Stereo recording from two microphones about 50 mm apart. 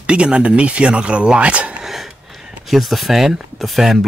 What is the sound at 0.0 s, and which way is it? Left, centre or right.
Speech, centre.